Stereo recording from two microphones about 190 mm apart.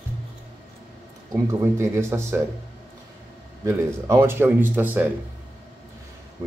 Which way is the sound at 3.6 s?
15° right (ahead or behind).